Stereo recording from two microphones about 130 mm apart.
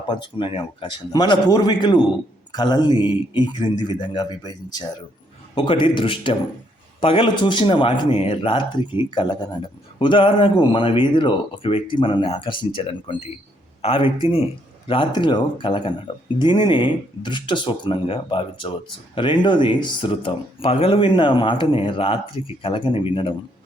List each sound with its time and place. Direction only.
0.1 s speech: 40° left (ahead or behind)
20.9 s speech: 40° left (ahead or behind)